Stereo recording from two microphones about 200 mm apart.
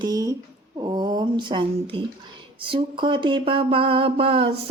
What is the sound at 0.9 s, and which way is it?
Speech, 25° right (ahead or behind).